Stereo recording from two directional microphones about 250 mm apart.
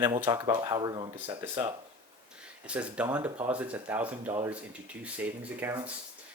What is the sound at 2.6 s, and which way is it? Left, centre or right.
Speech, centre.